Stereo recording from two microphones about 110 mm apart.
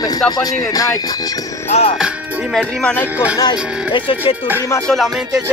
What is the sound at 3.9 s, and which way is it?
Speech, 50° left (ahead or behind).